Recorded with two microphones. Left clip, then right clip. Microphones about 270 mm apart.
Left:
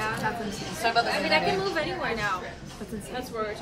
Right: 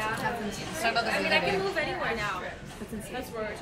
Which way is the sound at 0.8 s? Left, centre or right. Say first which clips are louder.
Left 3 dB; left.